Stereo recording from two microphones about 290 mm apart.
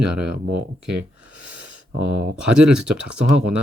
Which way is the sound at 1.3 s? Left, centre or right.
Right.